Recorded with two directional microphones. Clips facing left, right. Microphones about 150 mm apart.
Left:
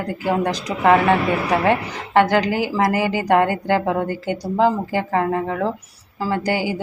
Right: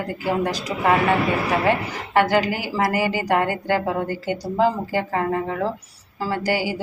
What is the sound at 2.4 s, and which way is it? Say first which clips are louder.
A woman's voice: left 4 dB; 20° left (ahead or behind).